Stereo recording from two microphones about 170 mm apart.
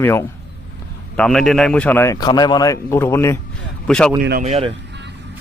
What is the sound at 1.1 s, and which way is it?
A man's voice, 5° left (ahead or behind).